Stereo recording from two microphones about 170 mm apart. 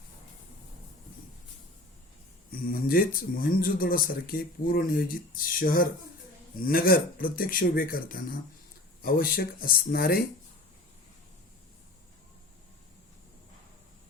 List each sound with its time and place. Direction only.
2.5 s speech: 55° left (ahead or behind)